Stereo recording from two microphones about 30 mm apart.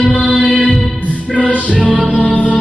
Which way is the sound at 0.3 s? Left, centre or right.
Left.